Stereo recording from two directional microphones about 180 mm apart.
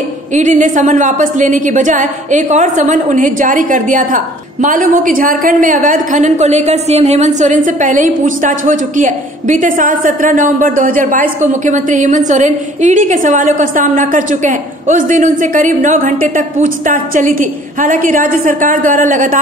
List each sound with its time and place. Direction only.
0.3 s a woman's voice: 45° right (ahead or behind)